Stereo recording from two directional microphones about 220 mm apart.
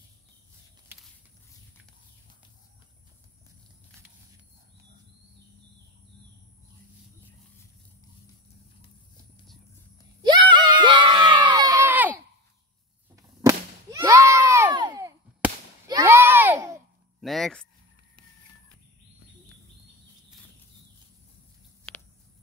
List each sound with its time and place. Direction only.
10.2 s crowd: 20° right (ahead or behind)
13.1 s whip: 15° right (ahead or behind)
17.2 s a sound: centre (ahead or behind)